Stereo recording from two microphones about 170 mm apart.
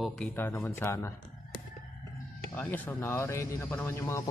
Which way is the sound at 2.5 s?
10° left (ahead or behind).